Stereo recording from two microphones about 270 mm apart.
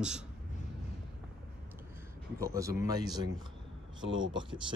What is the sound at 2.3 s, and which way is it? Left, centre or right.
Speech, centre.